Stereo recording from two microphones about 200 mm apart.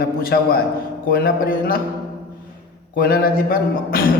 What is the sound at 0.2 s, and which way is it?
A man's voice, 50° left (ahead or behind).